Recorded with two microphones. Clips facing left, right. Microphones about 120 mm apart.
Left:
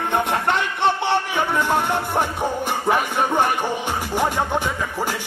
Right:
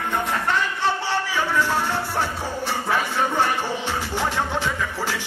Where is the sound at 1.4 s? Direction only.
20° left (ahead or behind).